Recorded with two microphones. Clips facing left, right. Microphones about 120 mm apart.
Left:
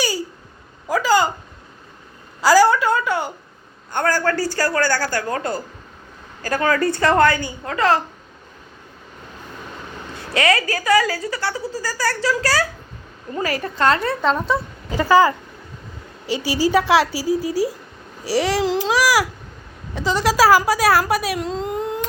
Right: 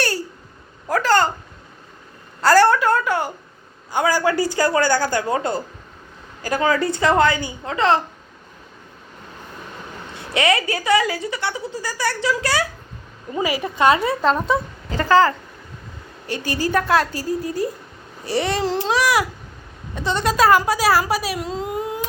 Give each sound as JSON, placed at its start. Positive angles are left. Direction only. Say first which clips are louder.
{"t": 0.0, "sound": "a sound", "louder": "even", "side_deg": 0}
{"t": 2.4, "sound": "a sound", "louder": "even", "side_deg": 5}
{"t": 3.9, "sound": "a man's voice", "louder": "right 1 dB", "side_deg": -10}
{"t": 10.3, "sound": "a woman's voice", "louder": "even", "side_deg": -20}
{"t": 14.8, "sound": "speech", "louder": "left 1 dB", "side_deg": 10}
{"t": 16.6, "sound": "speech", "louder": "left 3 dB", "side_deg": 10}